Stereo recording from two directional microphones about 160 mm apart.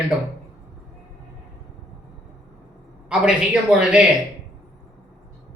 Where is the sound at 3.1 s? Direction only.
5° right (ahead or behind).